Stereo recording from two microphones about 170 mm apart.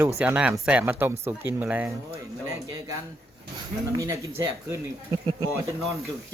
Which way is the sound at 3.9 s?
20° right (ahead or behind).